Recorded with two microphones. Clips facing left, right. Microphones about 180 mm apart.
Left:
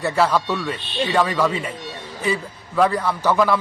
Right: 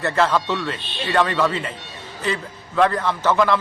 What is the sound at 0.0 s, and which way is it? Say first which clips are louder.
A man's voice: even; 10° left (ahead or behind).